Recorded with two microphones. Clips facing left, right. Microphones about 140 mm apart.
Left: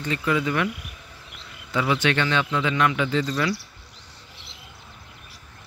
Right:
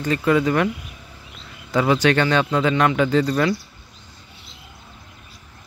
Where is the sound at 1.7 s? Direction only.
40° right (ahead or behind).